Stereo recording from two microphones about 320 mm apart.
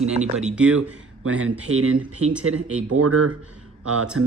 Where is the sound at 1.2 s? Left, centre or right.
Right.